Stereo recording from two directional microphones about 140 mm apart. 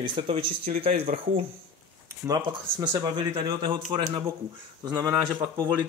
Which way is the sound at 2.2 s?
25° right (ahead or behind).